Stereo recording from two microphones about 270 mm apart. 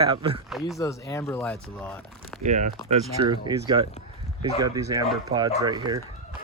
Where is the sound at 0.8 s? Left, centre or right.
Centre.